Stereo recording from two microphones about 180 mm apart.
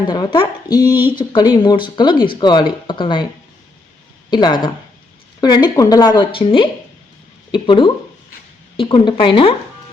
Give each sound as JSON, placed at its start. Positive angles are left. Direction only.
{"t": 0.1, "sound": "speech", "side_deg": 25}
{"t": 4.3, "sound": "speech", "side_deg": 25}